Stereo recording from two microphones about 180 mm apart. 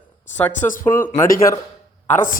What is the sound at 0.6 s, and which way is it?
Speech, 45° left (ahead or behind).